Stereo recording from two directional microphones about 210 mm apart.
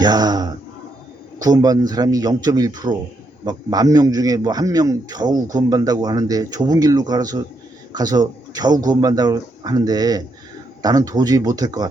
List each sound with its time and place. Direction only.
0.0 s a man's voice: 20° right (ahead or behind)